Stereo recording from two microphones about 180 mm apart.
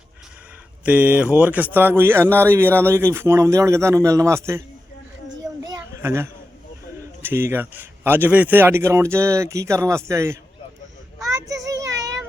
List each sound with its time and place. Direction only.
0.9 s speech: 10° right (ahead or behind)
5.4 s children playing: 20° right (ahead or behind)
7.2 s speech: 10° right (ahead or behind)
11.3 s child singing: 20° right (ahead or behind)